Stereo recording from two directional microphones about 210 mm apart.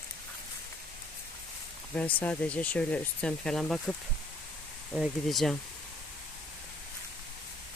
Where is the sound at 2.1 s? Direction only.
5° left (ahead or behind).